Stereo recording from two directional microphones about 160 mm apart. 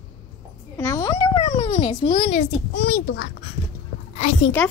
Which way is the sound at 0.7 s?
15° left (ahead or behind).